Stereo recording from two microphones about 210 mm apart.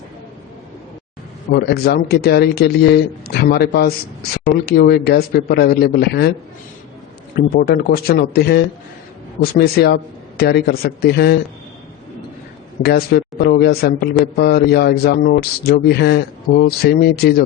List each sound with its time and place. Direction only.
1.5 s speech: 50° left (ahead or behind)
7.3 s speech: 45° left (ahead or behind)
12.8 s speech: 50° left (ahead or behind)